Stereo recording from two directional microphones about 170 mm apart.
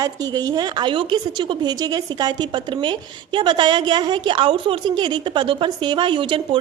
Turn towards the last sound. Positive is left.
turn(degrees=-30)  # may be behind; listen again after turning